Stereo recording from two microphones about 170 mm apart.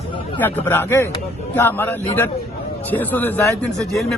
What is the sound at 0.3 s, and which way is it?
A man's voice, 10° left (ahead or behind).